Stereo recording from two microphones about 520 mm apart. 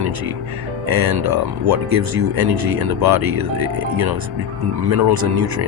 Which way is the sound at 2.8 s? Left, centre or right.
Right.